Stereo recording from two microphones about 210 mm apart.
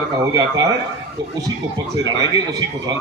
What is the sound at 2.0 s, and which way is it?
Speech, 20° right (ahead or behind).